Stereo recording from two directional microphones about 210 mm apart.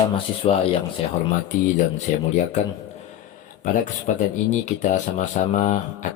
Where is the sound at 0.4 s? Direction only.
25° left (ahead or behind).